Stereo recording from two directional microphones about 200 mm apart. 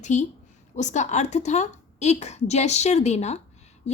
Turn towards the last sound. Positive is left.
turn(degrees=35)  # may be behind; listen again after turning